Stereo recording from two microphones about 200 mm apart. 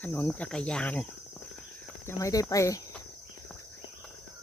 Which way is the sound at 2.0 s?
15° left (ahead or behind).